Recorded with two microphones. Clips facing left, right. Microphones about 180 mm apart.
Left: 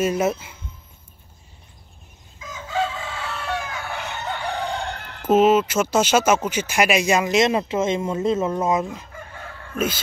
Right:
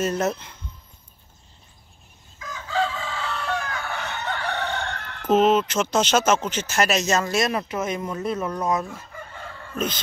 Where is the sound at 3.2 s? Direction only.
5° left (ahead or behind).